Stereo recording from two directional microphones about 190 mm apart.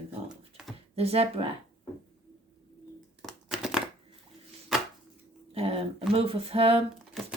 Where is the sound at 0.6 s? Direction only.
5° right (ahead or behind).